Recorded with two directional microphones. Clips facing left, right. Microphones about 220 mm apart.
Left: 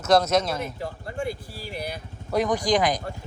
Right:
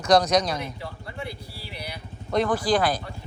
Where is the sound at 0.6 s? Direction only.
45° left (ahead or behind).